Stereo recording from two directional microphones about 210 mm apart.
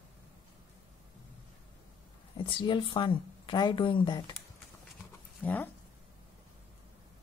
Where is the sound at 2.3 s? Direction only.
25° left (ahead or behind).